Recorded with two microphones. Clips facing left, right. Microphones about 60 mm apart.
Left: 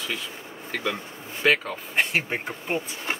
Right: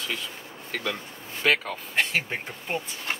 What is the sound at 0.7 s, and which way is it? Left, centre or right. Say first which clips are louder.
Speech: left 2 dB; centre.